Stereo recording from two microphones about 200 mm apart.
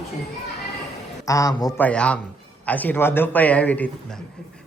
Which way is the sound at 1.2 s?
15° left (ahead or behind).